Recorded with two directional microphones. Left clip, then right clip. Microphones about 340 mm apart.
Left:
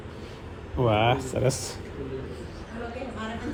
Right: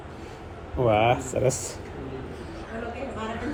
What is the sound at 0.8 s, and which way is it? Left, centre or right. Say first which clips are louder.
Speech: right 2 dB; left.